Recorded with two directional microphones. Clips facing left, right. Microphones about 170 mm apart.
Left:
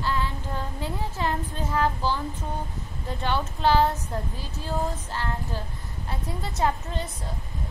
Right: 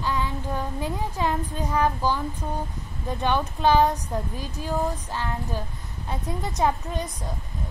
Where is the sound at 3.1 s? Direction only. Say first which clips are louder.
Right 3 dB; 15° right (ahead or behind).